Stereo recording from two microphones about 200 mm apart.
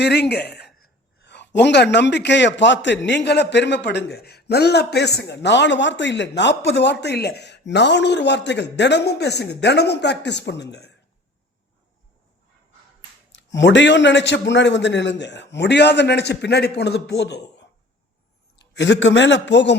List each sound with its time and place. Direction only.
0.0 s a man's voice: 55° left (ahead or behind)
13.3 s a man's voice: 65° left (ahead or behind)